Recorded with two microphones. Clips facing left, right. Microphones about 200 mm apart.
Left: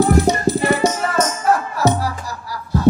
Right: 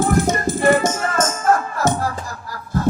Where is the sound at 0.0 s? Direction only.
50° right (ahead or behind).